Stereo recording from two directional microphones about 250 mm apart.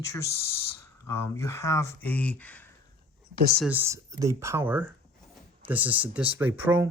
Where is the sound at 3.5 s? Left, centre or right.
Centre.